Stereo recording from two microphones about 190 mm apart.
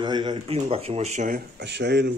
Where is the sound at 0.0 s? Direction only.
25° right (ahead or behind); by 1.4 s 40° right (ahead or behind).